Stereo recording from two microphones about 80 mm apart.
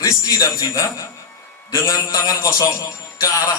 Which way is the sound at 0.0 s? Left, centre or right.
Left.